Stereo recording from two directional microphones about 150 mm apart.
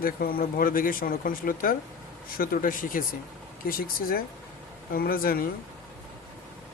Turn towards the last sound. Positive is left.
turn(degrees=75)  # may be behind; listen again after turning